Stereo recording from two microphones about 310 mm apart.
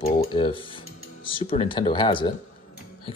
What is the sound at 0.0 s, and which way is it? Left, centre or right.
Speech, centre.